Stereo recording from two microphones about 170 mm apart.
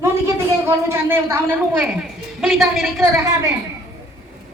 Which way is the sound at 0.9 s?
15° right (ahead or behind).